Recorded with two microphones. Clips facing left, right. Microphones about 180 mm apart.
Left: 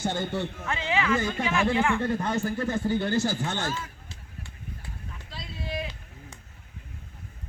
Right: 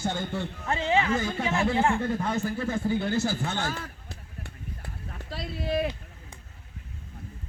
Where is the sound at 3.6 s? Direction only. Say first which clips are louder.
Left 1 dB; 60° right (ahead or behind).